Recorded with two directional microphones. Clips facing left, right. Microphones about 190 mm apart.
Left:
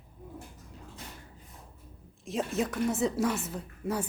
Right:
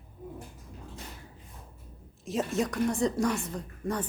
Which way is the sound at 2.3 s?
Centre (ahead or behind).